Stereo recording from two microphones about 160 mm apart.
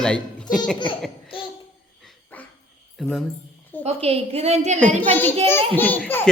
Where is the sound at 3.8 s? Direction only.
40° right (ahead or behind).